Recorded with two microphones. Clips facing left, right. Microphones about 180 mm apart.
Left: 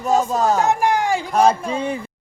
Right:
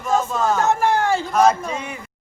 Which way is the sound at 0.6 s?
15° left (ahead or behind).